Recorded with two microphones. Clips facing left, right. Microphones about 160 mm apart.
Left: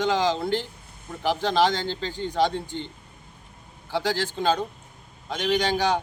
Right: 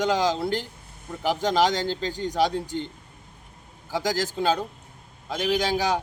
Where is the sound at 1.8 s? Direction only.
40° right (ahead or behind).